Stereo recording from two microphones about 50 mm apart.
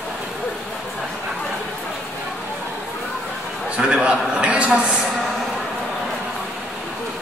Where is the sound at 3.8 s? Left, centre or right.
Centre.